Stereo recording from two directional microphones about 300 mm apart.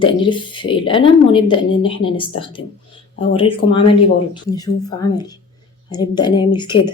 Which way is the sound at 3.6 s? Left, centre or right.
Centre.